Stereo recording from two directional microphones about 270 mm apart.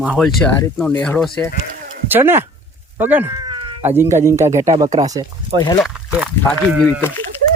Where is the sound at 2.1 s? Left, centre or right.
Centre.